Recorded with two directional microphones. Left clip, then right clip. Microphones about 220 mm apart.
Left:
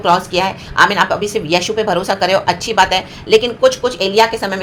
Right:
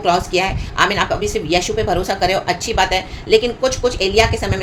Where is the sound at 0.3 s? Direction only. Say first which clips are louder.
Left 4 dB; 15° left (ahead or behind).